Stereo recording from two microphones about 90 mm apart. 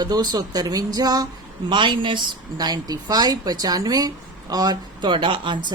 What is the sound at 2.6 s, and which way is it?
Speech, 50° right (ahead or behind).